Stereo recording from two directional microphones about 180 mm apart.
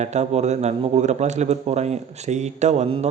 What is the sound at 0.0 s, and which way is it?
Speech, 40° right (ahead or behind).